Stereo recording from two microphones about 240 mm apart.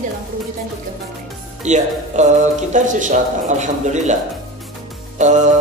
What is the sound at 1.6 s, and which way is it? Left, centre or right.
Speech, right.